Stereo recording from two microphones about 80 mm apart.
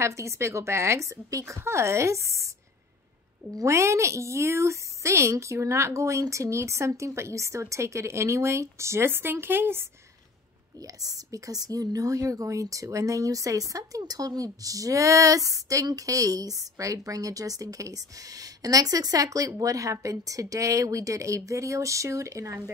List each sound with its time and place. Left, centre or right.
0.0 s a woman's voice: right
3.5 s a woman's voice: right
10.8 s a woman's voice: right